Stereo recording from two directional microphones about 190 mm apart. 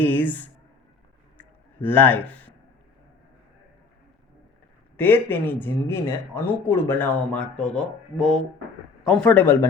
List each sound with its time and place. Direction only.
0.0 s speech: 10° left (ahead or behind)
1.4 s a sound: 10° left (ahead or behind)
4.9 s speech: 10° left (ahead or behind)